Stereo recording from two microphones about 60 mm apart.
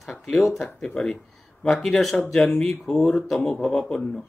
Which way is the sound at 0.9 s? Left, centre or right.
Centre.